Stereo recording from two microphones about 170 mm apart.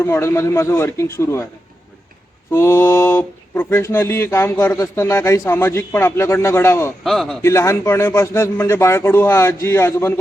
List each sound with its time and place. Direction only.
0.0 s speech: 15° left (ahead or behind)
2.5 s speech: 15° left (ahead or behind)
7.0 s a man's voice: centre (ahead or behind)
7.4 s speech: 15° left (ahead or behind)